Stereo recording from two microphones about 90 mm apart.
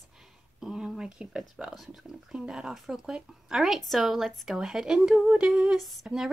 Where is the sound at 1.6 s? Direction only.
5° right (ahead or behind).